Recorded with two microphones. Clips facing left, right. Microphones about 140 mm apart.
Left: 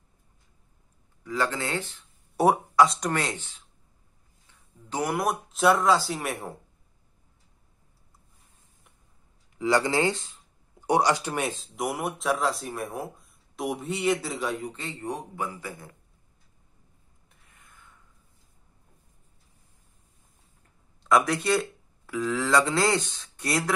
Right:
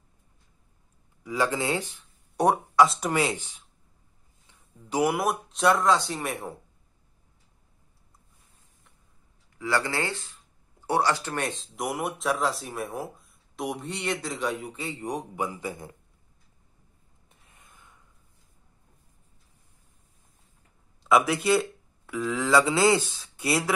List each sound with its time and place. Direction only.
1.2 s a man's voice: 10° right (ahead or behind)
2.3 s speech: centre (ahead or behind)
4.8 s speech: 10° right (ahead or behind)
9.6 s speech: 20° left (ahead or behind); by 14.7 s centre (ahead or behind)
14.7 s a man's voice: 10° right (ahead or behind)
17.5 s gasp: 20° right (ahead or behind)
20.6 s speech: 5° right (ahead or behind)